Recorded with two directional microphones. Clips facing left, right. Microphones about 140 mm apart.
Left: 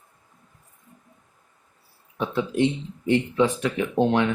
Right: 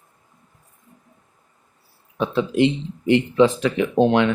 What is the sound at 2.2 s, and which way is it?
Speech, 90° right.